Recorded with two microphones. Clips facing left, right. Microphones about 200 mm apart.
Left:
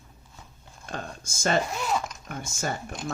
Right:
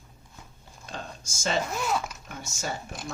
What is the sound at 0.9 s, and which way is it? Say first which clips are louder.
Speech: left 3 dB; 55° left (ahead or behind).